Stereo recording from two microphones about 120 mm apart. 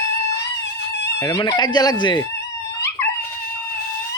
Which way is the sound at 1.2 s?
30° left (ahead or behind).